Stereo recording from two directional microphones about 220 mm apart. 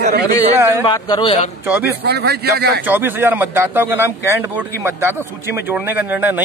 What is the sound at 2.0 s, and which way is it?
Speech, 45° right (ahead or behind).